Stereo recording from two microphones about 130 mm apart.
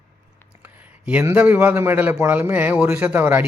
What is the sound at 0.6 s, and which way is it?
A man's voice, 10° right (ahead or behind).